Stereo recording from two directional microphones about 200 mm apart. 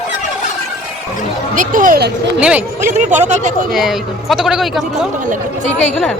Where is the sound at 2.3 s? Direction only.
5° right (ahead or behind).